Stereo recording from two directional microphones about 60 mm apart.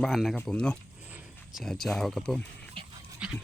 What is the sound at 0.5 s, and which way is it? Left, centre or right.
Speech, centre.